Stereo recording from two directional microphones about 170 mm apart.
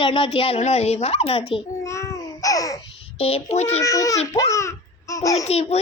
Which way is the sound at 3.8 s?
20° left (ahead or behind).